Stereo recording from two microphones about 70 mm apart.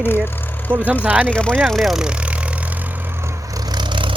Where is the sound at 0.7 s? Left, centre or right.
Right.